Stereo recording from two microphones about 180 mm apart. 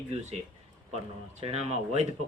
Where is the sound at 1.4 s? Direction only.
35° right (ahead or behind).